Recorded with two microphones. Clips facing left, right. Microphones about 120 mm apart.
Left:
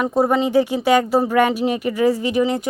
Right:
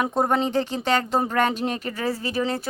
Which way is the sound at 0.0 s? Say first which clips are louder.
Left 4 dB; 5° left (ahead or behind).